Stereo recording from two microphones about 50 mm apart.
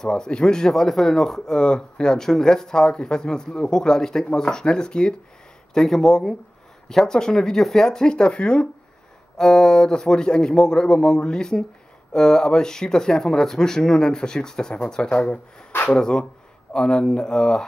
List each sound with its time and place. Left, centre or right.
0.0 s speech: centre